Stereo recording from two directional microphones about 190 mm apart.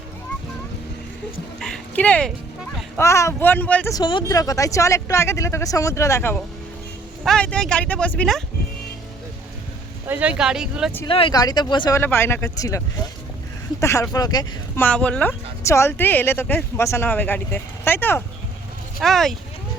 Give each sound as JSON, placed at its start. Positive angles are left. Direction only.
{"t": 1.5, "sound": "music", "side_deg": 0}
{"t": 3.0, "sound": "speech", "side_deg": 15}
{"t": 3.9, "sound": "speech", "side_deg": 20}
{"t": 10.1, "sound": "speech", "side_deg": -5}
{"t": 11.1, "sound": "speech", "side_deg": 25}
{"t": 13.8, "sound": "speech", "side_deg": 15}
{"t": 14.8, "sound": "speech", "side_deg": 5}